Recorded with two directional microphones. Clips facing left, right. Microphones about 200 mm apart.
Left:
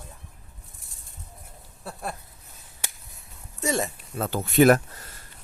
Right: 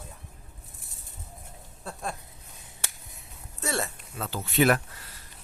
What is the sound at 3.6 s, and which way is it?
Speech, 15° left (ahead or behind).